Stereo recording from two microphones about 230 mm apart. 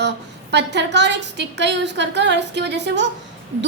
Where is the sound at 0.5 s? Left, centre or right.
Right.